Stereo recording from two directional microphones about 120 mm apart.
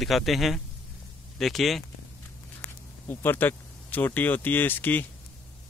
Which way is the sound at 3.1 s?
15° left (ahead or behind).